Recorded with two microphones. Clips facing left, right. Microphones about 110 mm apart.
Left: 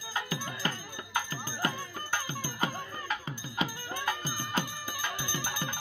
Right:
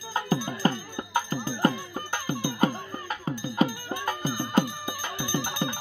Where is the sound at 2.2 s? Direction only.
50° right (ahead or behind).